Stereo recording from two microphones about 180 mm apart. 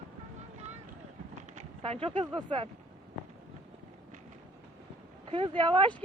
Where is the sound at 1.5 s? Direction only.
35° right (ahead or behind).